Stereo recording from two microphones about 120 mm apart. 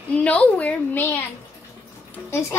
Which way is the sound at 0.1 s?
10° left (ahead or behind).